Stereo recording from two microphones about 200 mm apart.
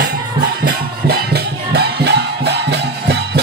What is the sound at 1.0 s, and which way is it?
Music, 55° right (ahead or behind).